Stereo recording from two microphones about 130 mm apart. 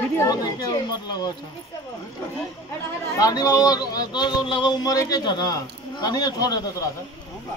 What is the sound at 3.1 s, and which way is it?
Speech, 30° left (ahead or behind).